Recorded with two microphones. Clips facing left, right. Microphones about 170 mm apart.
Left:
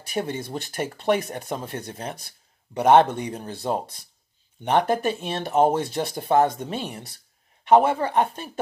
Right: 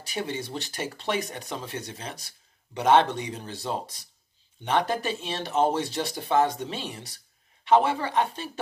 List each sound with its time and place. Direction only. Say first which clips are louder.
0.0 s speech: left 4 dB; 50° left (ahead or behind)